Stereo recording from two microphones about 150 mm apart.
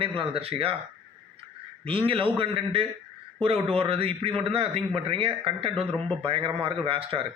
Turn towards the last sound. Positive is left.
turn(degrees=-35)  # may be behind; listen again after turning